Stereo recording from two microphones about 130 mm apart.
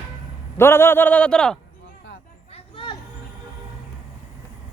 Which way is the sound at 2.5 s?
45° left (ahead or behind).